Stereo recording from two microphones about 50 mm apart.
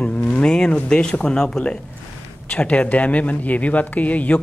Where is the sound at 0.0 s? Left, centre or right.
Left.